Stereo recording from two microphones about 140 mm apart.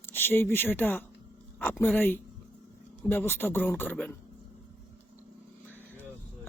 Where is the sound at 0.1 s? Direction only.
15° left (ahead or behind).